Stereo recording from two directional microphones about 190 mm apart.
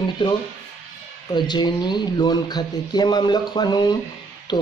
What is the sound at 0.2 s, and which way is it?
Speech, 20° left (ahead or behind).